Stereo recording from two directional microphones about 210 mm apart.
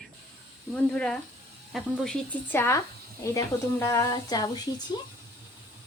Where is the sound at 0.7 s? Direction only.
5° left (ahead or behind).